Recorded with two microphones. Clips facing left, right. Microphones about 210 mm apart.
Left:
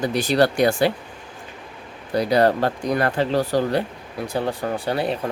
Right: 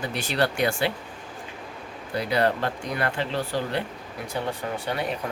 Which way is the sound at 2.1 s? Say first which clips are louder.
Left 6 dB; 40° left (ahead or behind).